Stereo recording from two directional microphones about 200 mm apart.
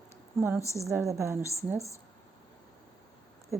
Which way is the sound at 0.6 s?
15° left (ahead or behind).